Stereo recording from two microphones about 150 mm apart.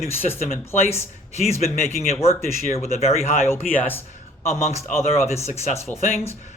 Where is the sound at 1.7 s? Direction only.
45° left (ahead or behind).